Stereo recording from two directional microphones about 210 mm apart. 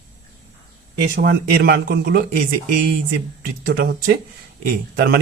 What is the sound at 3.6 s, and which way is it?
Speech, 40° right (ahead or behind).